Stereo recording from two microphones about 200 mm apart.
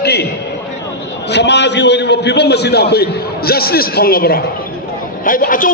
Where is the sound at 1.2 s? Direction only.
60° left (ahead or behind).